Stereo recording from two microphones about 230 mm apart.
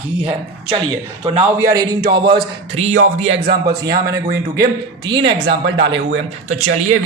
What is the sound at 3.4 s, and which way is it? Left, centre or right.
Speech, right.